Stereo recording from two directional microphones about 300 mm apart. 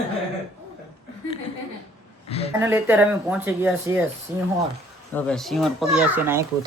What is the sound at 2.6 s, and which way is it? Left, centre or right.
Speech, centre.